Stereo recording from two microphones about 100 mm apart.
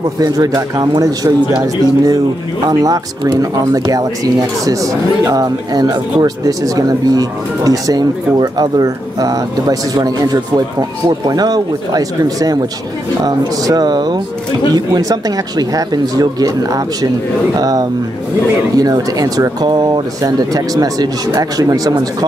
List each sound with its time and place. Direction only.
0.2 s speech: 40° right (ahead or behind)
19.6 s speech: 45° right (ahead or behind)